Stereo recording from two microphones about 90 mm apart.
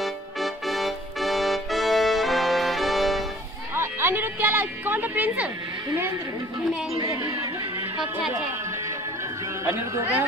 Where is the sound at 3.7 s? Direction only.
25° right (ahead or behind).